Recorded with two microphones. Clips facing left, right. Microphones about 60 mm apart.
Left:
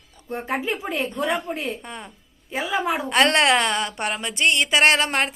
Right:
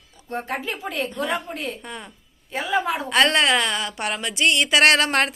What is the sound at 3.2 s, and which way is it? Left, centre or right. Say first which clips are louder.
Speech: left 1 dB; left.